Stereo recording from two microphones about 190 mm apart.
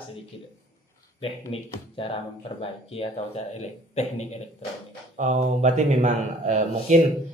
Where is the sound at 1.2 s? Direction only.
30° left (ahead or behind).